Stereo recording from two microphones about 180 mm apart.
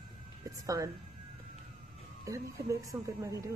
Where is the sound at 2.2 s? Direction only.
15° right (ahead or behind).